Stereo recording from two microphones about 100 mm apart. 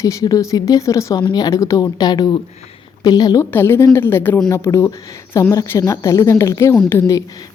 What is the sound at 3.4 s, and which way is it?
A woman's voice, 25° left (ahead or behind).